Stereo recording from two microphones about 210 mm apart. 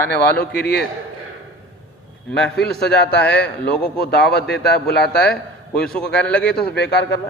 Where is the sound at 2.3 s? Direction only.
55° left (ahead or behind).